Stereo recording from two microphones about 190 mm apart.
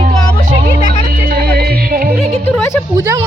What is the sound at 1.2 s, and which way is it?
Music, 55° right (ahead or behind).